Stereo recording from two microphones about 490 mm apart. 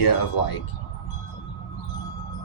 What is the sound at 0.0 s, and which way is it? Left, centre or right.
Speech, left.